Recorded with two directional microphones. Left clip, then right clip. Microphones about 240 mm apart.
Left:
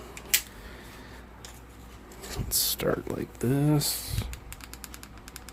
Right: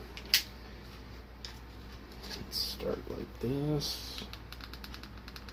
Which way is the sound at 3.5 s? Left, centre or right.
Left.